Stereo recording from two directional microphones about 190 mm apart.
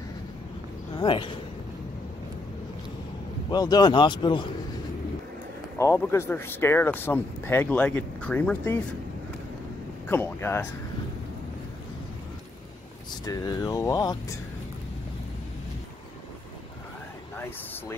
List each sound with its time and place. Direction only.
0.9 s speech: 25° left (ahead or behind)
3.4 s speech: 20° left (ahead or behind)
5.8 s speech: 10° left (ahead or behind)
10.0 s speech: 10° left (ahead or behind)
13.2 s speech: 20° left (ahead or behind)